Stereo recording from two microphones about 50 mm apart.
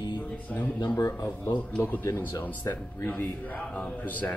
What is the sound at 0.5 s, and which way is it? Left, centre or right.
Speech, left.